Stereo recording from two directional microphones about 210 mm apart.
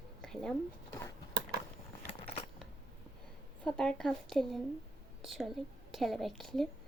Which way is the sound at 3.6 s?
5° left (ahead or behind).